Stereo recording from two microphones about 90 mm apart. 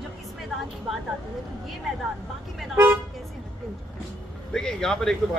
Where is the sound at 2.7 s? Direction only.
25° right (ahead or behind).